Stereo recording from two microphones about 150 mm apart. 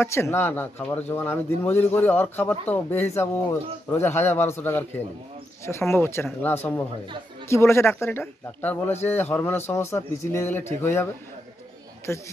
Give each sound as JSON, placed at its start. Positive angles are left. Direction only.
{"t": 0.0, "sound": "speech", "side_deg": 15}
{"t": 12.1, "sound": "speech", "side_deg": 20}